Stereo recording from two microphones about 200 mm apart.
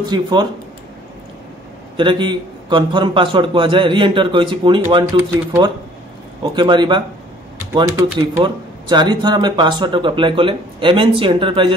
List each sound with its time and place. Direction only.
0.0 s speech: 20° right (ahead or behind)
2.0 s speech: 25° right (ahead or behind)